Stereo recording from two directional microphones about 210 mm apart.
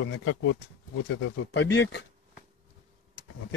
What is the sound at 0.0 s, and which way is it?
Speech, 65° left (ahead or behind).